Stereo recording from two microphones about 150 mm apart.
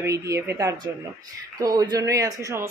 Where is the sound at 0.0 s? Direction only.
20° right (ahead or behind).